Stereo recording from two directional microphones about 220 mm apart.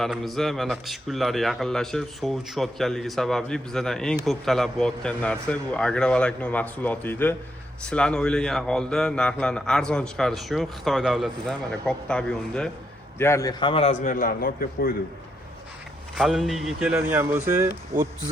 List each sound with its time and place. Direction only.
0.0 s a man's voice: centre (ahead or behind); by 14.9 s 40° left (ahead or behind)
16.1 s a man's voice: centre (ahead or behind)